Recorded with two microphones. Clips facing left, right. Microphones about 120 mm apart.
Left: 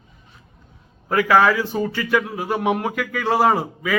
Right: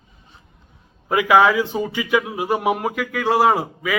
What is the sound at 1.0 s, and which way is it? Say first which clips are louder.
Speech: right 1 dB; 15° right (ahead or behind).